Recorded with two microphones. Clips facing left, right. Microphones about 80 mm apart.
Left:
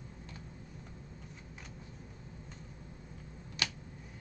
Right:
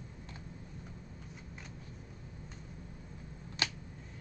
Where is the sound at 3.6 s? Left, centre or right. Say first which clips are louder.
Right 1 dB; right.